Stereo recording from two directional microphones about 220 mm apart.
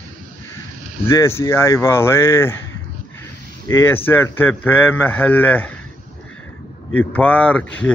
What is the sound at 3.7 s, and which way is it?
Speech, 10° left (ahead or behind).